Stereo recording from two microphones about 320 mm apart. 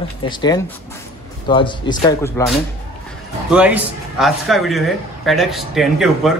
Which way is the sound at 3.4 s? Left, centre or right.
Centre.